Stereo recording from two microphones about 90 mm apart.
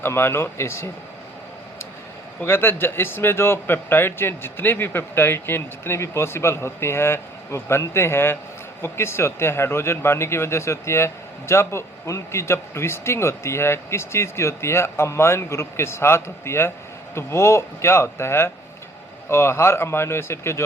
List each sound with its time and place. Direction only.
0.0 s speech: 25° left (ahead or behind)
2.4 s speech: 25° left (ahead or behind)